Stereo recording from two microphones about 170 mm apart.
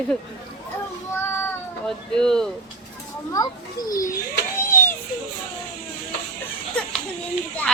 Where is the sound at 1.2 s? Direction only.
15° left (ahead or behind).